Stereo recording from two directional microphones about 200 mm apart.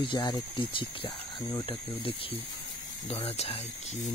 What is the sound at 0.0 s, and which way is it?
Speech, 25° left (ahead or behind).